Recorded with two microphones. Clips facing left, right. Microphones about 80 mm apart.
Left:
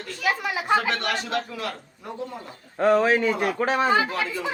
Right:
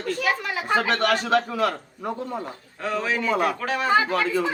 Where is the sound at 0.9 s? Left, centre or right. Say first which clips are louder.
Right 5 dB; right.